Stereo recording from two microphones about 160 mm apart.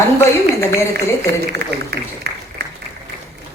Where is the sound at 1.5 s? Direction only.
90° right.